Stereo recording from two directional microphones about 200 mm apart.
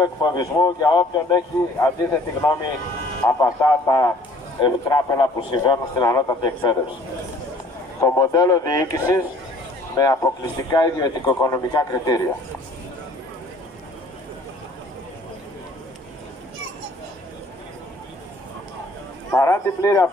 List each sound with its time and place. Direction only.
0.0 s a man's voice: 20° left (ahead or behind)
8.0 s speech: 15° left (ahead or behind)
19.3 s speech: 15° left (ahead or behind)